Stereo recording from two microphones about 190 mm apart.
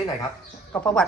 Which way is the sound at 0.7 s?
10° left (ahead or behind).